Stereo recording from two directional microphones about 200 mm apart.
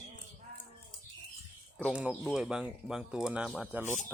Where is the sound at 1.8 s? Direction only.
5° right (ahead or behind).